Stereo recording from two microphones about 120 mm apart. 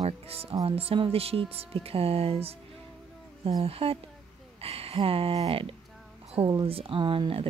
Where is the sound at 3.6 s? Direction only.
55° right (ahead or behind).